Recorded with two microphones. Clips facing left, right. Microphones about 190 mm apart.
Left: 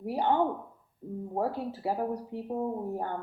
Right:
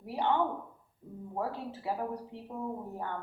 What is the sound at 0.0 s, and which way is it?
Speech, 40° left (ahead or behind).